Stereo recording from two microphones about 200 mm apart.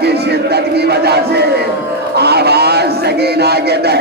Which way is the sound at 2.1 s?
55° right (ahead or behind).